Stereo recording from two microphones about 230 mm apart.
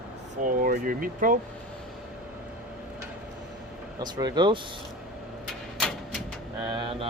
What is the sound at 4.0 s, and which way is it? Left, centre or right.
Speech, centre.